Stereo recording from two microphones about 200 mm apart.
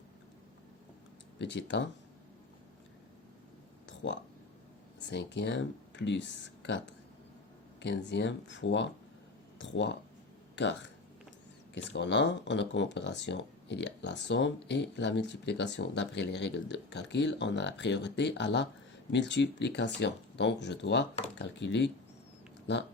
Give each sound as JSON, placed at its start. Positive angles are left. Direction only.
{"t": 1.4, "sound": "speech", "side_deg": 60}
{"t": 3.8, "sound": "a sound", "side_deg": 65}
{"t": 5.0, "sound": "speech", "side_deg": 60}